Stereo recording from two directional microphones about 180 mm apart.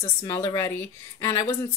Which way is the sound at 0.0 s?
15° left (ahead or behind).